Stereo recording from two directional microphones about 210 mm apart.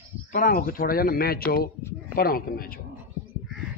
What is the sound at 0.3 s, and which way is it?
A man's voice, 40° left (ahead or behind).